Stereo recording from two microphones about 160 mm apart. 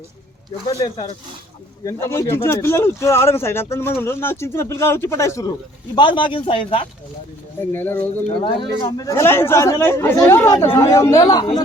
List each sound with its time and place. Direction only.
0.8 s speech: 25° left (ahead or behind)
5.9 s speech: 30° left (ahead or behind)
7.7 s speech: 15° left (ahead or behind)
8.4 s speech: 30° left (ahead or behind)